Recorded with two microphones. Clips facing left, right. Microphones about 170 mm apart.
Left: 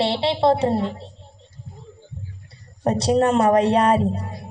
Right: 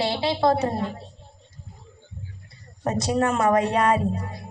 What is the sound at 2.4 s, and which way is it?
Speech, 35° left (ahead or behind).